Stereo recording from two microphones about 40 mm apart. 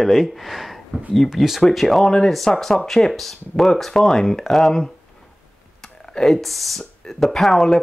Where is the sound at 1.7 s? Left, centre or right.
Centre.